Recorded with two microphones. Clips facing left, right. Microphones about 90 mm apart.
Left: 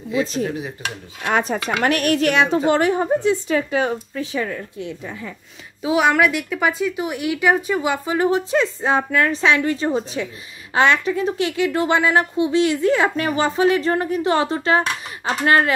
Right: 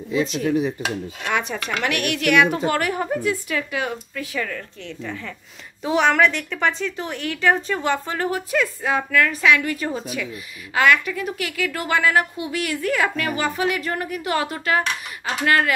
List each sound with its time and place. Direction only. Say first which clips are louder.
0.2 s a woman's voice: right 3 dB; 35° left (ahead or behind); by 8.3 s 10° left (ahead or behind)
8.3 s a woman's voice: left 1 dB; 25° left (ahead or behind)